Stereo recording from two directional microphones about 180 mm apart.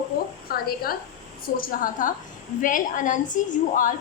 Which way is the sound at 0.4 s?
55° left (ahead or behind).